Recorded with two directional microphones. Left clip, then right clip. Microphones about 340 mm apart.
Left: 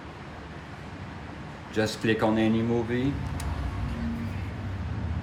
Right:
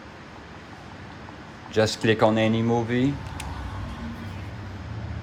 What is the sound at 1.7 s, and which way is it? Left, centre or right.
Speech, centre.